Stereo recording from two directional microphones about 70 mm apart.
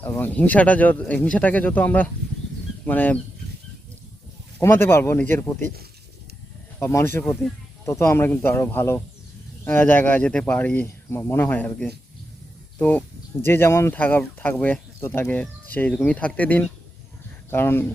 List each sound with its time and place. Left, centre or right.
0.0 s speech: left
4.6 s speech: left
5.1 s speech: left
6.7 s speech: left
7.4 s speech: centre
7.9 s speech: left
12.8 s speech: left
13.5 s speech: left
13.9 s speech: left
15.3 s speech: left